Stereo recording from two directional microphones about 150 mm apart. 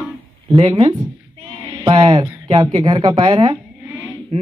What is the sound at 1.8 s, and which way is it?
Speech, 30° right (ahead or behind).